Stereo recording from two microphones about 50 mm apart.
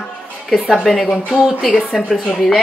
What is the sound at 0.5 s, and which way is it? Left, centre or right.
Speech, centre.